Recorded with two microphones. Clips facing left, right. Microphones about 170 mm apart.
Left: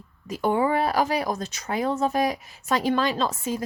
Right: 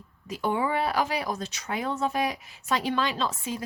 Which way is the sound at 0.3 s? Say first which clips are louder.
Left 5 dB; 45° left (ahead or behind).